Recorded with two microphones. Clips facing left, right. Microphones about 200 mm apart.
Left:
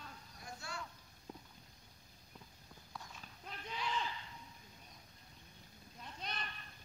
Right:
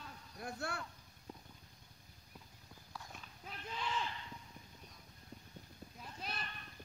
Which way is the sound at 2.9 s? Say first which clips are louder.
Even; centre (ahead or behind).